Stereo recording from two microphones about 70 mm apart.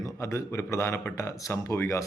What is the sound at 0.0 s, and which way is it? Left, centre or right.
A man's voice, left.